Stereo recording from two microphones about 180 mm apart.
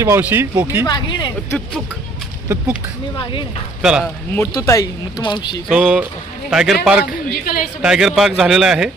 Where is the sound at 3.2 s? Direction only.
30° left (ahead or behind).